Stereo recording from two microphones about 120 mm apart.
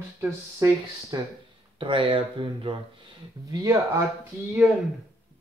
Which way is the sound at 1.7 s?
40° right (ahead or behind).